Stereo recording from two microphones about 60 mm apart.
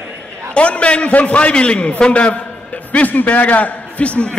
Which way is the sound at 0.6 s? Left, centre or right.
Centre.